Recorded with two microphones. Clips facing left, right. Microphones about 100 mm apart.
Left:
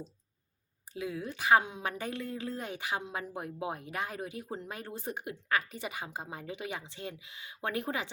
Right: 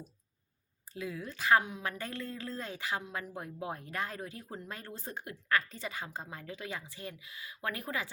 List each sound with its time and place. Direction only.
0.9 s a woman's voice: 20° left (ahead or behind)